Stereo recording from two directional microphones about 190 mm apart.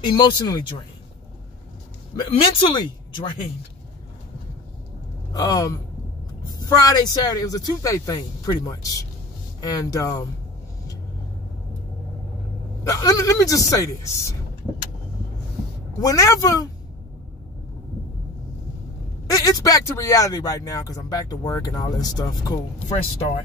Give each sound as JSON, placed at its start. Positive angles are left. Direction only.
{"t": 0.0, "sound": "speech", "side_deg": 25}
{"t": 2.1, "sound": "speech", "side_deg": 25}
{"t": 5.3, "sound": "speech", "side_deg": 20}
{"t": 12.8, "sound": "speech", "side_deg": 20}
{"t": 16.0, "sound": "speech", "side_deg": 15}
{"t": 19.3, "sound": "speech", "side_deg": 20}